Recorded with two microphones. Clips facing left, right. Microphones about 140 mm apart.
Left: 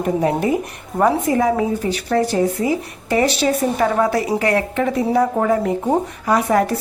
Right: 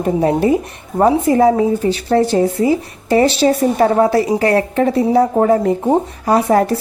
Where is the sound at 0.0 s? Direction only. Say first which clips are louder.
Right 4 dB; 30° right (ahead or behind).